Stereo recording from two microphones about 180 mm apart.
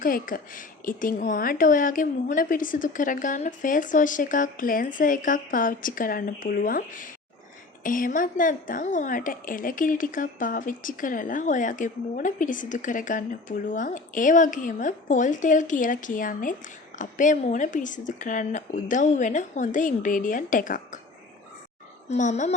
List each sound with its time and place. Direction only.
0.0 s a woman's voice: 50° left (ahead or behind)
22.1 s a woman's voice: 40° left (ahead or behind)